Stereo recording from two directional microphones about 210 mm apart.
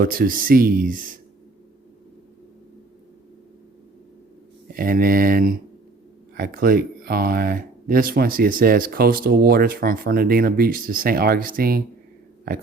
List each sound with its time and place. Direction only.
0.0 s speech: 40° right (ahead or behind)
4.7 s speech: 45° right (ahead or behind)